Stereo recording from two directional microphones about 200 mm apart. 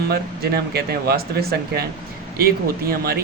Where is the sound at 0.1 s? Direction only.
50° right (ahead or behind).